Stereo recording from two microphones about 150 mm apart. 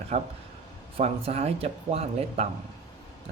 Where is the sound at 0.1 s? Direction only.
45° right (ahead or behind).